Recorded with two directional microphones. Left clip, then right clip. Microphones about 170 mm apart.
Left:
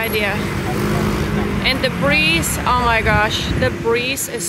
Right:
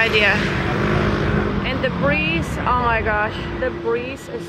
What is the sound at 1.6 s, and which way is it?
Speech, 20° left (ahead or behind).